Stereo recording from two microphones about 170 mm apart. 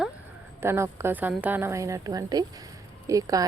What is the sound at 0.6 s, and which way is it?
Speech, 15° right (ahead or behind).